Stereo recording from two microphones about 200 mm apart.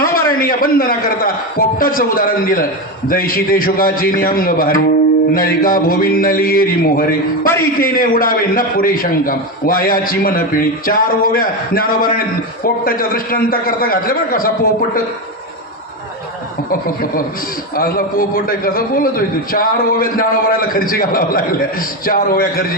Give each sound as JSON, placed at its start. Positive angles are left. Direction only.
{"t": 0.0, "sound": "a man's voice", "side_deg": 45}
{"t": 16.8, "sound": "a man's voice", "side_deg": 45}